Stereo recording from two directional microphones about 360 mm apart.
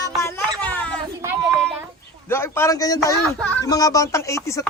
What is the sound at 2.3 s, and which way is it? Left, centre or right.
A man's voice, centre.